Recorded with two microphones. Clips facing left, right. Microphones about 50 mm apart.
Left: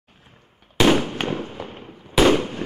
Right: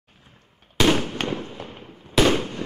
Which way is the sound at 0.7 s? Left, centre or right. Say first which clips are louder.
Left 3 dB; centre.